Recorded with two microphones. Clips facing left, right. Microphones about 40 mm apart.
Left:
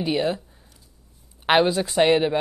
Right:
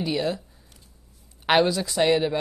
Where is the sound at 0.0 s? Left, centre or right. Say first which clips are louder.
Left 3 dB; left.